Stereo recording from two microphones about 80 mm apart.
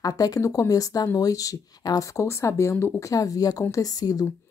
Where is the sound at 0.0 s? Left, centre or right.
Left.